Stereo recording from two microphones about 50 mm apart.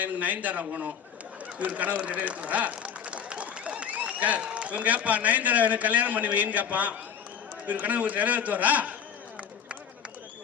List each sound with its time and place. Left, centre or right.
0.0 s a man's voice: right